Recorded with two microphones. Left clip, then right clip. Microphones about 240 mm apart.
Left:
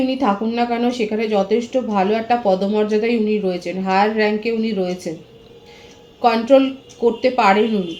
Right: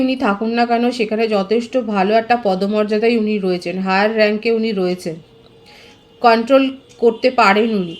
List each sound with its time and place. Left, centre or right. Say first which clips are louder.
0.0 s speech: right 1 dB; right
6.2 s speech: right 2 dB; right